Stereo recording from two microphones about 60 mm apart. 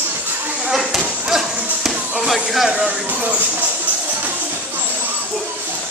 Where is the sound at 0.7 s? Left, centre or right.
Centre.